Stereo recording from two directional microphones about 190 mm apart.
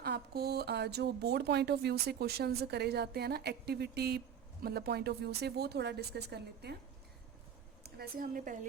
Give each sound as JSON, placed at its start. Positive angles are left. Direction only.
{"t": 0.0, "sound": "speech", "side_deg": -55}
{"t": 7.9, "sound": "speech", "side_deg": -55}